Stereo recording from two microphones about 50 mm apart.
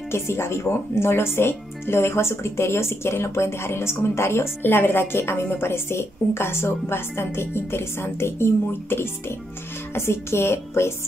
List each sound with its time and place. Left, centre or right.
0.1 s speech: left